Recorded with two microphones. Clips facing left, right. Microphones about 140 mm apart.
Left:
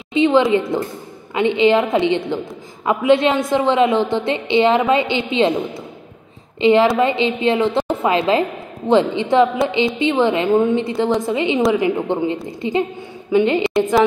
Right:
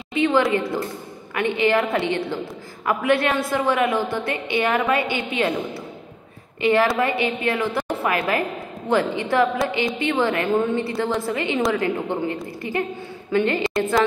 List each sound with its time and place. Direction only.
0.1 s a woman's voice: 20° left (ahead or behind)
6.6 s a woman's voice: 20° left (ahead or behind)